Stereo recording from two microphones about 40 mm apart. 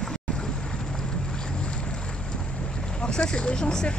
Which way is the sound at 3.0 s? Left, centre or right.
Left.